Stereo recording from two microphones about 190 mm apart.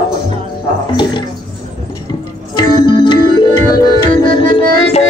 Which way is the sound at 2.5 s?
25° left (ahead or behind).